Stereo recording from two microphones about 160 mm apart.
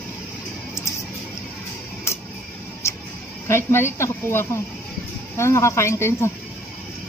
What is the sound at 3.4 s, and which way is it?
Speech, 15° left (ahead or behind).